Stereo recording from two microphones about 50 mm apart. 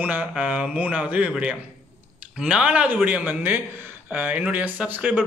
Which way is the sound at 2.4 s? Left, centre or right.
Right.